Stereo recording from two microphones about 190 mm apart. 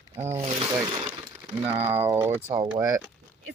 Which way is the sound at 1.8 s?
10° right (ahead or behind).